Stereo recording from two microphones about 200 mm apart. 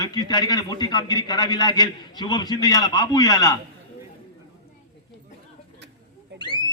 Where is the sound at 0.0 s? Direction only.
20° left (ahead or behind).